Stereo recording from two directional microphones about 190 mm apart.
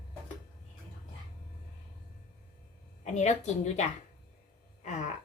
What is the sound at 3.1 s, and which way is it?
Speech, 35° left (ahead or behind).